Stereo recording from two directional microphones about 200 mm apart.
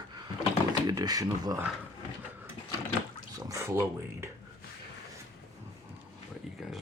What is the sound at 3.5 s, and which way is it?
Speech, 15° right (ahead or behind).